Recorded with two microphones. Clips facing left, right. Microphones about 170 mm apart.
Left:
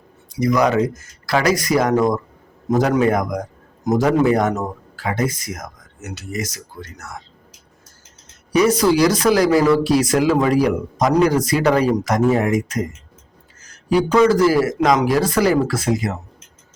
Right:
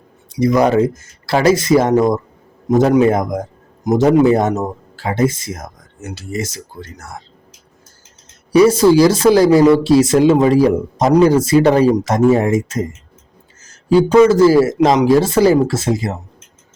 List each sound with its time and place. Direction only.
0.3 s speech: 30° right (ahead or behind)
8.5 s speech: 30° right (ahead or behind)